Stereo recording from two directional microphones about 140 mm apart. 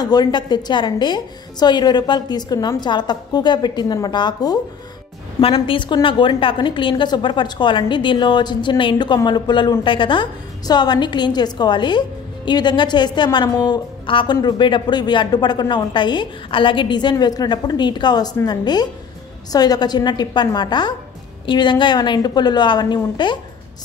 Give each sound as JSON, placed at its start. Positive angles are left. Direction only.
{"t": 0.0, "sound": "a woman's voice", "side_deg": 30}